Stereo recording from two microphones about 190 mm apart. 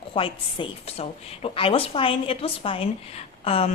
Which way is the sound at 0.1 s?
25° left (ahead or behind).